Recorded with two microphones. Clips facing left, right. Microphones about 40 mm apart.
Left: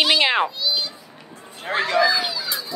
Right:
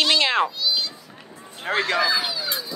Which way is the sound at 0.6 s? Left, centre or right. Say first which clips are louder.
Even; centre.